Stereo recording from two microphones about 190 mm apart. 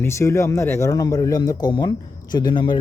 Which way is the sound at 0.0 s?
15° left (ahead or behind).